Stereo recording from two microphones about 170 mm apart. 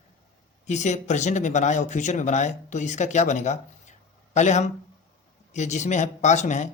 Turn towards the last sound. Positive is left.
turn(degrees=45)  # may be behind; listen again after turning